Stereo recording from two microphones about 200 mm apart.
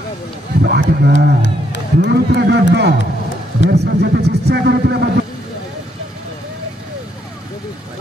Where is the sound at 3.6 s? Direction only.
55° right (ahead or behind).